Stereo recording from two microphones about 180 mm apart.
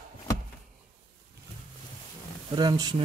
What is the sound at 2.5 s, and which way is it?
Speech, 25° right (ahead or behind).